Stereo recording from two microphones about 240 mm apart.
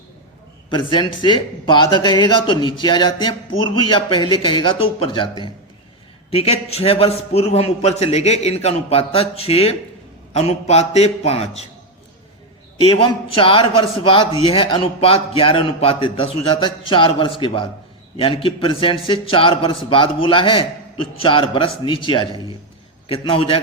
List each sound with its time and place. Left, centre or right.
0.7 s a man's voice: centre
12.8 s a man's voice: left